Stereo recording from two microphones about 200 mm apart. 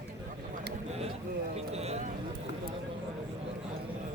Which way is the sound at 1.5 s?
30° right (ahead or behind).